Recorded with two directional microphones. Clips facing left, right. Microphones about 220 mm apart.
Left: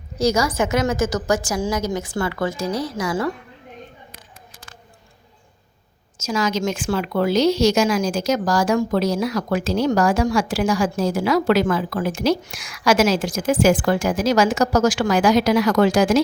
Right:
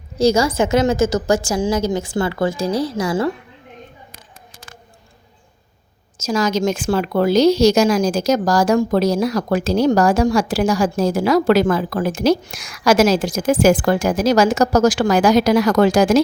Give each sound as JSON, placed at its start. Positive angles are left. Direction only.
{"t": 0.2, "sound": "a woman's voice", "side_deg": -30}
{"t": 6.1, "sound": "a woman's voice", "side_deg": -35}